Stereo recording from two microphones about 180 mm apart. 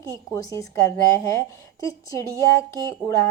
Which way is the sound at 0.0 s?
20° left (ahead or behind).